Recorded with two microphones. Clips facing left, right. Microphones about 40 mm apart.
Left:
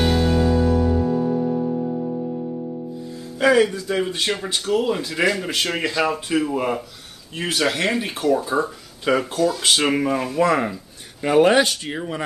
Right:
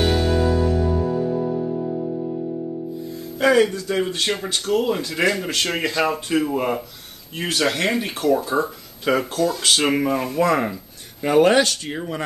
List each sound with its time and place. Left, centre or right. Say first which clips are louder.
0.0 s music: even; centre
3.3 s speech: even; centre